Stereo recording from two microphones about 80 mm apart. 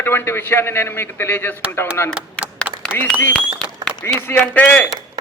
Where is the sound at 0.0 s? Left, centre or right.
Left.